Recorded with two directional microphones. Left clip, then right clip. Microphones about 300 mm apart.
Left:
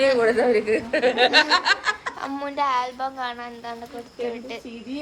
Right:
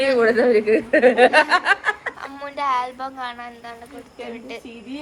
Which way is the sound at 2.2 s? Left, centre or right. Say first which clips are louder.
Left 3 dB; centre.